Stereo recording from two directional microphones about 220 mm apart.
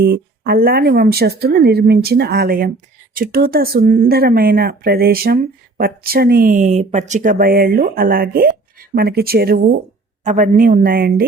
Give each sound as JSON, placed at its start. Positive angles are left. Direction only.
{"t": 0.0, "sound": "speech", "side_deg": -45}